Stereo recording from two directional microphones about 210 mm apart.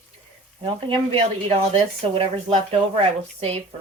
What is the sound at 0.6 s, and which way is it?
Speech, 25° right (ahead or behind).